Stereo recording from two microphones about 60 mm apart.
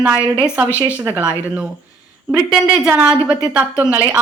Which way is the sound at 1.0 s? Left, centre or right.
Right.